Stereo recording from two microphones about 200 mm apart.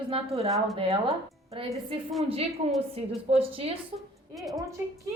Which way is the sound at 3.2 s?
30° right (ahead or behind).